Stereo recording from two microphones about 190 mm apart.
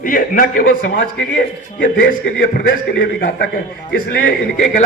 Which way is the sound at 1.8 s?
45° left (ahead or behind).